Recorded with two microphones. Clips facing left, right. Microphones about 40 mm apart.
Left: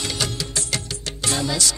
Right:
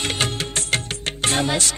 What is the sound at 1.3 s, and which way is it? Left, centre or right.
Music, right.